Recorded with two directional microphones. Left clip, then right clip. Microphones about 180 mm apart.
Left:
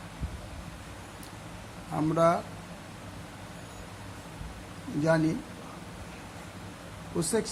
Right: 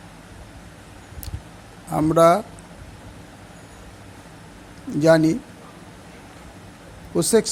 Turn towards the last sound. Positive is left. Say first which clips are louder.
# right 11 dB
turn(degrees=-50)  # may be behind; listen again after turning